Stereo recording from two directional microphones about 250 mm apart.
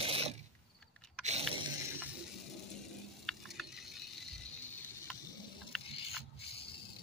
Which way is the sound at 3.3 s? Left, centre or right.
Centre.